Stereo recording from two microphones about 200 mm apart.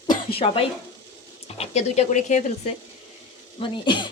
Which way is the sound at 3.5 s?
25° left (ahead or behind).